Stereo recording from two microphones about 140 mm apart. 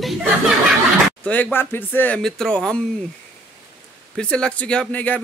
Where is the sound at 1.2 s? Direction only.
10° left (ahead or behind).